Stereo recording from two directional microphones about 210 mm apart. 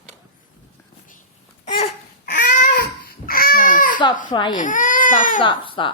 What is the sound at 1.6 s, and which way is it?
Babbling, 30° left (ahead or behind).